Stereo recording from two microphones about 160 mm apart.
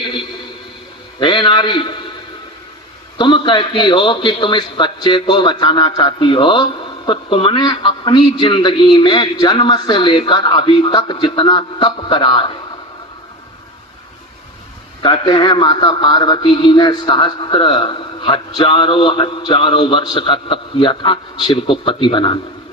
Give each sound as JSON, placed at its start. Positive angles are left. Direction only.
{"t": 1.2, "sound": "a man's voice", "side_deg": 30}
{"t": 3.2, "sound": "a man's voice", "side_deg": 30}
{"t": 15.0, "sound": "a man's voice", "side_deg": 30}